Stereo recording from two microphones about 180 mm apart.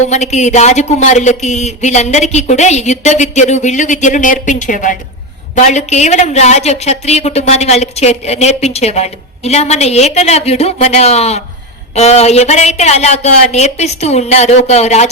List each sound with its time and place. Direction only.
0.1 s speech: 40° left (ahead or behind)